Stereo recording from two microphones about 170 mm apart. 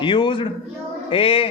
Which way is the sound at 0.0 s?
30° left (ahead or behind).